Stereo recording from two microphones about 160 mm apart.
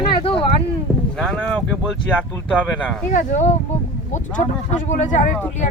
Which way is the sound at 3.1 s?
50° left (ahead or behind).